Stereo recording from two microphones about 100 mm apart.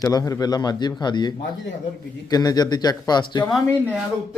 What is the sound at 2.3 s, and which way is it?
A man's voice, 40° left (ahead or behind).